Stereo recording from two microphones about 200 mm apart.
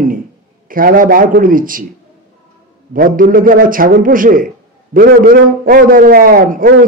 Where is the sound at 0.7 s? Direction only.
45° right (ahead or behind).